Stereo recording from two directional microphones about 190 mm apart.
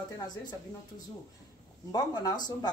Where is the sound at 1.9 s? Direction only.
20° left (ahead or behind).